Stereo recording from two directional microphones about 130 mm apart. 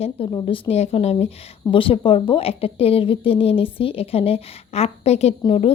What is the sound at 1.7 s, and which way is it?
A woman's voice, 45° left (ahead or behind).